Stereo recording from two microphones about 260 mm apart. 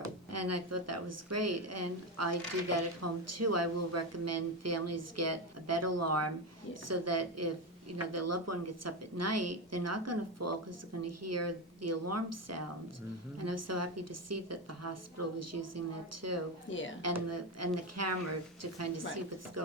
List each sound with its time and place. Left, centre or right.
0.0 s speech: right
16.6 s speech: left
17.0 s speech: right